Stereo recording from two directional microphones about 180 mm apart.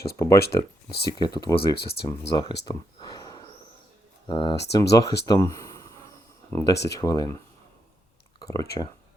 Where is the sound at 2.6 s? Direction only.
25° left (ahead or behind).